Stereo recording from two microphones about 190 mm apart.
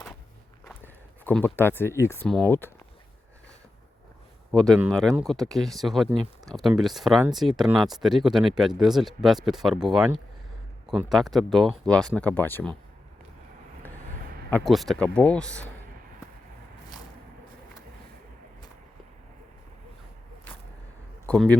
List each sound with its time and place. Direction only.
1.2 s speech: 5° left (ahead or behind)
4.5 s speech: 5° left (ahead or behind)
14.5 s speech: centre (ahead or behind)
21.2 s speech: 5° left (ahead or behind)